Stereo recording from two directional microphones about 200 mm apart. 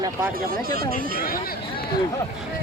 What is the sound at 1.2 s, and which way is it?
Speech, 45° left (ahead or behind).